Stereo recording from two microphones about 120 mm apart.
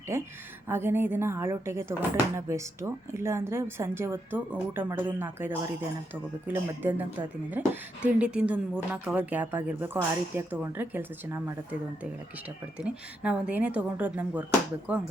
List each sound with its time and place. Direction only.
0.1 s speech: 25° right (ahead or behind)
12.8 s speech: 10° right (ahead or behind)